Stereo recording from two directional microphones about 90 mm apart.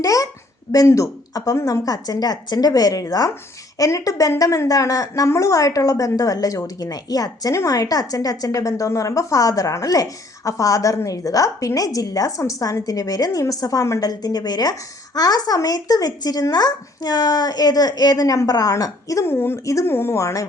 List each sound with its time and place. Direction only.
0.0 s a woman's voice: 40° left (ahead or behind)